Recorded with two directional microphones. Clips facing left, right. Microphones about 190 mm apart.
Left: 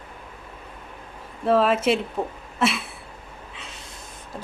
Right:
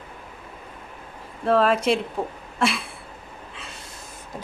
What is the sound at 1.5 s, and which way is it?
Speech, 5° left (ahead or behind).